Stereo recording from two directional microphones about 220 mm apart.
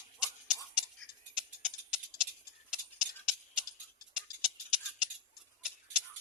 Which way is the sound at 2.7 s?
Centre (ahead or behind).